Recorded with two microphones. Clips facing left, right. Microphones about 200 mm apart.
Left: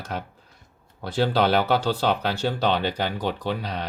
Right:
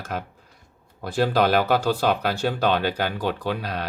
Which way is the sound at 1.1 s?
10° right (ahead or behind).